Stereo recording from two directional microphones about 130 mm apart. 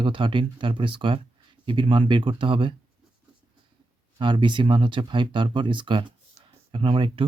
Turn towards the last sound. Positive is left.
turn(degrees=-45)  # may be behind; listen again after turning